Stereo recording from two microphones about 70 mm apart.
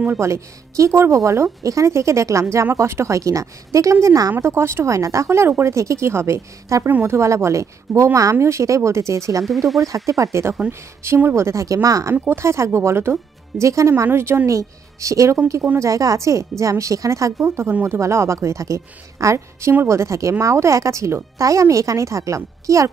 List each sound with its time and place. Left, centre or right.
0.2 s speech: right
4.3 s speech: right
6.9 s speech: right
7.2 s speech: right
12.3 s speech: right
14.0 s speech: right
17.4 s speech: right